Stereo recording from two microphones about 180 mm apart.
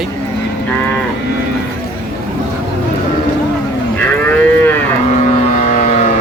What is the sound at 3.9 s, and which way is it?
Moo, 10° left (ahead or behind).